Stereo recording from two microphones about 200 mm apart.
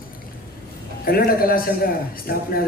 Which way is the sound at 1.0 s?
50° left (ahead or behind).